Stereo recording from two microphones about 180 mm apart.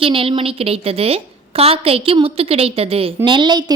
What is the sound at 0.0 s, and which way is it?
A woman's voice, 30° right (ahead or behind).